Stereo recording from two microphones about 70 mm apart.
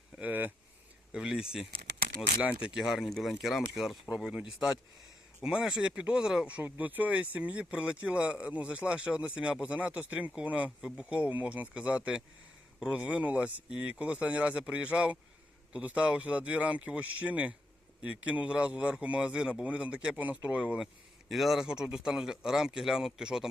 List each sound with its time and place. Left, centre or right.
0.2 s speech: right
1.1 s a man's voice: centre
6.6 s speech: right
10.8 s a man's voice: centre
11.0 s a man's voice: centre
20.8 s a man's voice: centre